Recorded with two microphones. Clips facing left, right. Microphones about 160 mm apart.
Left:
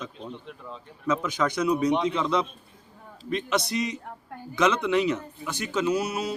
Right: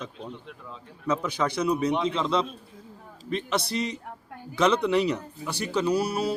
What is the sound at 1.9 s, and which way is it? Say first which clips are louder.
Speech: left 1 dB; centre (ahead or behind).